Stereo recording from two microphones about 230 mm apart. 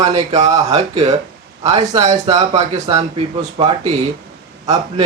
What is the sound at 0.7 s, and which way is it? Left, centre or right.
Speech, right.